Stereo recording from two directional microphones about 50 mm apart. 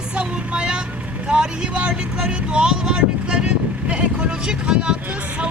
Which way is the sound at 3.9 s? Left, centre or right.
Right.